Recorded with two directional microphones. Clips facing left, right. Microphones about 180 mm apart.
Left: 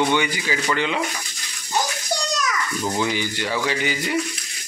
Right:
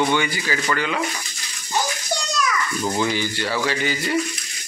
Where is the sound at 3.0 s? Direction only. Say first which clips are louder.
Right 1 dB; 15° left (ahead or behind).